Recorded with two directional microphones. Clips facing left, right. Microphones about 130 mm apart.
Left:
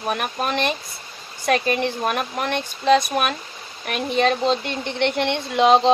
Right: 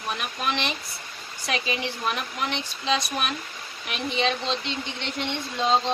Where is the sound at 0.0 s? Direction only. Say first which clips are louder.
Left 5 dB; 50° left (ahead or behind).